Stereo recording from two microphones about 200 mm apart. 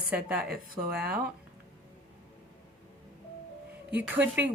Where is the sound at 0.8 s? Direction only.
25° right (ahead or behind).